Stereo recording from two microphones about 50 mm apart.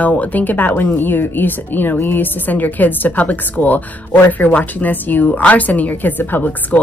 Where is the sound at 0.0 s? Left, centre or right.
Left.